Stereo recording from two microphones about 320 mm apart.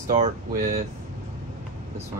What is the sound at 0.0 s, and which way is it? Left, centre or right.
Speech, right.